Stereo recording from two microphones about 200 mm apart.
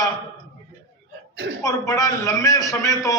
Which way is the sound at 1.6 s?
15° left (ahead or behind).